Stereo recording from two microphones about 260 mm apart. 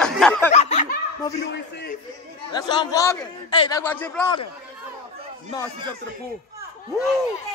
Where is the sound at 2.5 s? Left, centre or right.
Centre.